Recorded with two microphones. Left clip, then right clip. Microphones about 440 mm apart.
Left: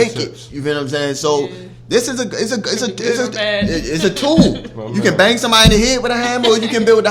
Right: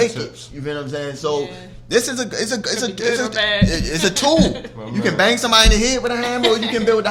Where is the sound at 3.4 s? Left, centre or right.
Right.